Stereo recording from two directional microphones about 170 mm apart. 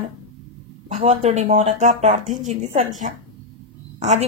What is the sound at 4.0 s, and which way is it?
Speech, 40° right (ahead or behind).